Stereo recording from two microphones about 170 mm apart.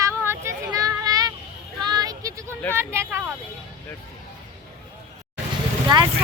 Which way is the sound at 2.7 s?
15° right (ahead or behind).